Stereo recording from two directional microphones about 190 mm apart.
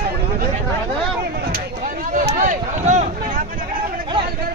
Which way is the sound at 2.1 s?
40° right (ahead or behind).